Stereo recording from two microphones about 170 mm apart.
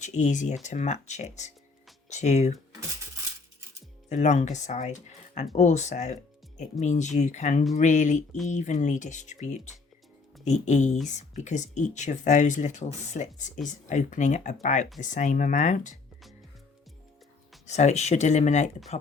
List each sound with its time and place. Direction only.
0.0 s speech: 45° left (ahead or behind)
4.1 s speech: 45° left (ahead or behind)
17.7 s speech: 40° left (ahead or behind)